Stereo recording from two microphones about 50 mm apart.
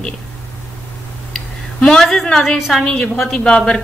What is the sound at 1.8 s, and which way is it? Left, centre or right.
Speech, centre.